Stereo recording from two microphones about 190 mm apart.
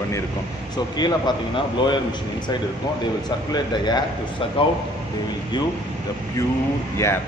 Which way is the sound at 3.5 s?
20° left (ahead or behind).